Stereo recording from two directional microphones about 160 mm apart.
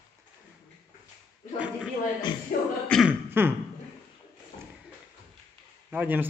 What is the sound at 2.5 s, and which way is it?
Beatboxing, 65° left (ahead or behind).